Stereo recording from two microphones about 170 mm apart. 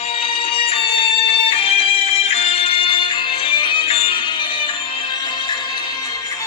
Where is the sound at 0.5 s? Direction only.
35° left (ahead or behind).